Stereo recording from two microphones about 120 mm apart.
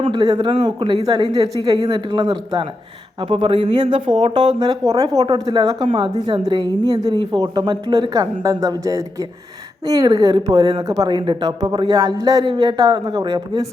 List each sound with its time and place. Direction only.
0.0 s speech: 40° right (ahead or behind)
3.2 s speech: 50° right (ahead or behind); by 13.7 s 35° right (ahead or behind)